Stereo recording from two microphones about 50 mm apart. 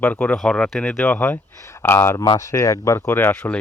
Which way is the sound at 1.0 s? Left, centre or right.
Left.